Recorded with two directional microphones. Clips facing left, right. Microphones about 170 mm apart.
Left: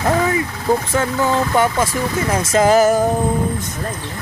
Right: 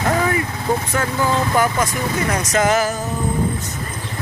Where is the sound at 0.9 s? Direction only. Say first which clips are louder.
Left 2 dB; 25° left (ahead or behind).